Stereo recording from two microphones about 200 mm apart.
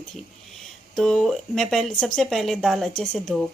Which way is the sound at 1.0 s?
Centre (ahead or behind).